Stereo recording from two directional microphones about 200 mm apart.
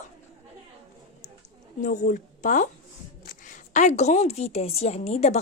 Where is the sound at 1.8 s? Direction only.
40° left (ahead or behind).